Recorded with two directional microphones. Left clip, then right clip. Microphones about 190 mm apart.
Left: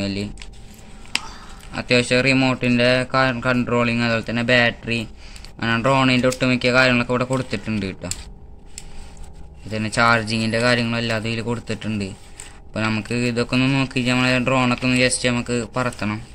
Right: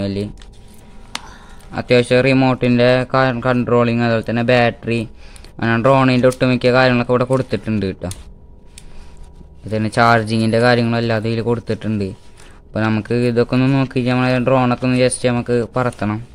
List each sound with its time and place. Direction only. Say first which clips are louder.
0.0 s speech: right 4 dB; 50° right (ahead or behind)
1.7 s speech: right 4 dB; 50° right (ahead or behind)
9.7 s speech: right 4 dB; 55° right (ahead or behind)